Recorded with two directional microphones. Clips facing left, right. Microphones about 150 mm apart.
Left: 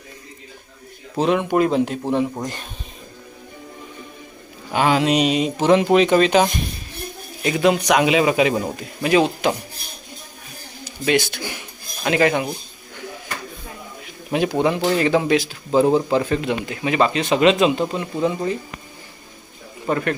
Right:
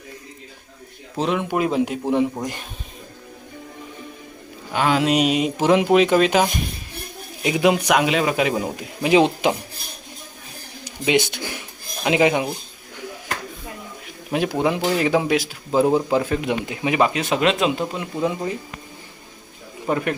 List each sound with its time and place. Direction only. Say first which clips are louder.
1.1 s speech: left 4 dB; centre (ahead or behind)
4.7 s speech: left 1 dB; 5° left (ahead or behind); by 9.6 s 20° right (ahead or behind)
10.8 s a man's voice: even; 15° right (ahead or behind)
14.3 s speech: left 2 dB; centre (ahead or behind)
19.9 s speech: left 1 dB; 10° right (ahead or behind)